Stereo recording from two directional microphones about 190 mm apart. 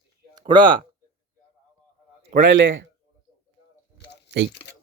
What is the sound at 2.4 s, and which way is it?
Speech, 85° right.